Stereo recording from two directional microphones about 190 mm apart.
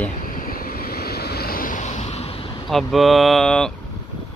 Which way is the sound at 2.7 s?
Centre (ahead or behind).